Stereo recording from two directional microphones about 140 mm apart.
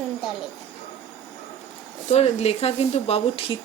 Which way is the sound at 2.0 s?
50° left (ahead or behind).